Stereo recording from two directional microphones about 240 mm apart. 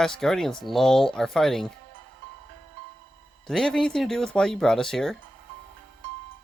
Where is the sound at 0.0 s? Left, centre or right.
Centre.